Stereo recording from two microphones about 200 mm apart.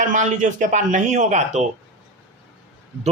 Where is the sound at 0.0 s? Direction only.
40° right (ahead or behind).